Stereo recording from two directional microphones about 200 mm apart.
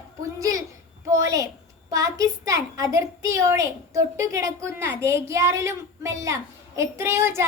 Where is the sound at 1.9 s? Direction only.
15° right (ahead or behind).